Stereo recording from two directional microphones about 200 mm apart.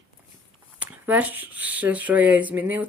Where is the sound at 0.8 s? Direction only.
10° right (ahead or behind).